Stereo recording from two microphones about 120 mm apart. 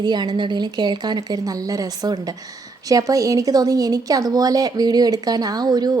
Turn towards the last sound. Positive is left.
turn(degrees=-35)  # may be behind; listen again after turning